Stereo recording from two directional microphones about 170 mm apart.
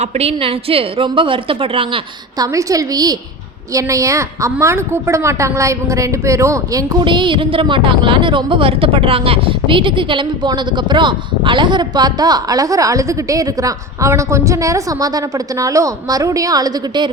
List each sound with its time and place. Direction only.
0.0 s a woman's voice: 35° right (ahead or behind)
2.4 s a woman's voice: 20° right (ahead or behind)